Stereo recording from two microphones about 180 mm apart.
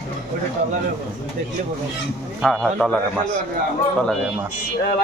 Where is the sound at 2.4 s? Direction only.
Centre (ahead or behind).